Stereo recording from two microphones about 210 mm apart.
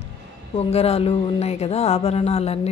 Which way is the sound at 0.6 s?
30° left (ahead or behind).